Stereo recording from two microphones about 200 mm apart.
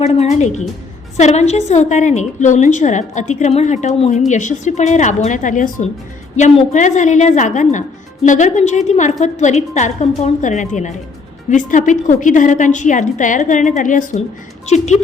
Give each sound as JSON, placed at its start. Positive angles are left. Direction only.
{"t": 0.0, "sound": "a woman's voice", "side_deg": 35}